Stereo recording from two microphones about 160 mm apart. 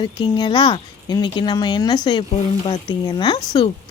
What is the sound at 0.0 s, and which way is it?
Chicken, 30° left (ahead or behind).